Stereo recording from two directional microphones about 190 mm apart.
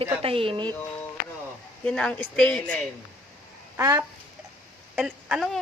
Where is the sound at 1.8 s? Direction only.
5° left (ahead or behind).